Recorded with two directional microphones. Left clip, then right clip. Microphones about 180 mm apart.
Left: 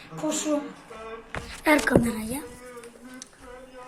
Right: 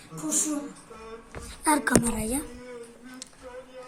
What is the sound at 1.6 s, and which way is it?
Speech, 25° right (ahead or behind).